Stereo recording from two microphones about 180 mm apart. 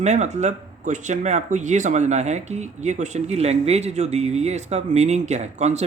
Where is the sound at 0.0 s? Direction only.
40° right (ahead or behind).